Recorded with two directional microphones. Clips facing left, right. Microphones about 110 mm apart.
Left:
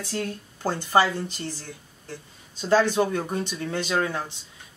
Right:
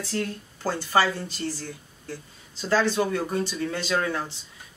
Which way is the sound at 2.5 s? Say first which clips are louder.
Left 3 dB; 15° left (ahead or behind).